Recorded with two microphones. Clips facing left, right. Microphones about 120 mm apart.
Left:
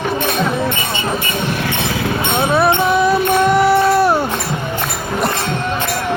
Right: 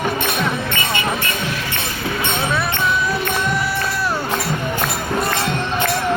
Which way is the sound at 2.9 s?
65° left (ahead or behind).